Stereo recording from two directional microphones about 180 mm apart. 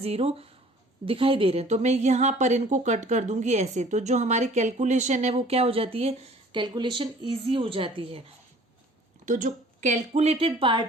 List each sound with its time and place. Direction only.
0.0 s a woman's voice: 35° right (ahead or behind)
9.2 s a woman's voice: 45° right (ahead or behind); by 10.8 s 30° right (ahead or behind)